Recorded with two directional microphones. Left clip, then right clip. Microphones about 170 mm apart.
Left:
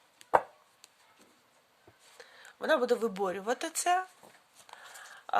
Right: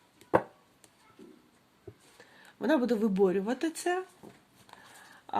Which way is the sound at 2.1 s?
30° left (ahead or behind).